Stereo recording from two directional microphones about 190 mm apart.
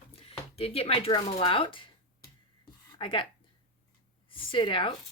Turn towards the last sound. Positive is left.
turn(degrees=25)  # may be behind; listen again after turning